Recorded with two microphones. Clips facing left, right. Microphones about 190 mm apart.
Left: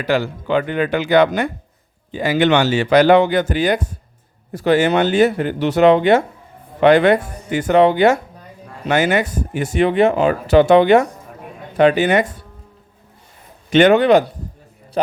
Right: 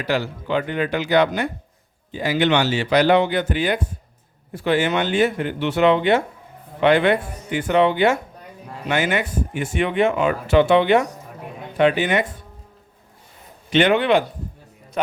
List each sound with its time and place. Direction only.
0.1 s speech: 55° left (ahead or behind)
13.7 s speech: 45° left (ahead or behind)